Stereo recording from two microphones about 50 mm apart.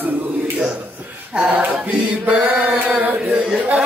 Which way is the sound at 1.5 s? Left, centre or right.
Right.